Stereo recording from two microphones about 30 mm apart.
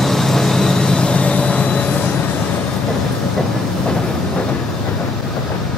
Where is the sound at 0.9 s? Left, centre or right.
Left.